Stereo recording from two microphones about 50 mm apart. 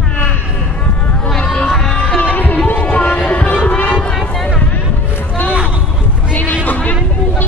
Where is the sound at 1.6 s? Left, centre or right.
Left.